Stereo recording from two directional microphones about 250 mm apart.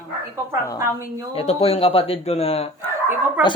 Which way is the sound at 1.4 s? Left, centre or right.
Left.